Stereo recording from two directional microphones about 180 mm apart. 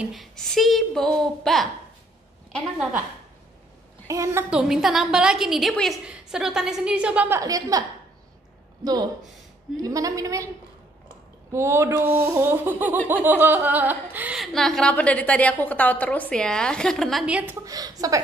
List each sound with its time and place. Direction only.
0.0 s speech: centre (ahead or behind)
4.1 s speech: 15° right (ahead or behind)
8.8 s a woman's voice: 20° right (ahead or behind)
11.5 s speech: 15° right (ahead or behind)
17.6 s a woman's voice: 20° right (ahead or behind)